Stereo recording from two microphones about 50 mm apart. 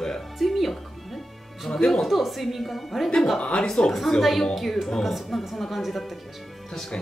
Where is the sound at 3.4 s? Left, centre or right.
Centre.